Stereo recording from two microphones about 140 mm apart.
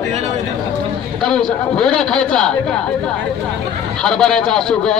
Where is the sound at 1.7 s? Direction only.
5° left (ahead or behind).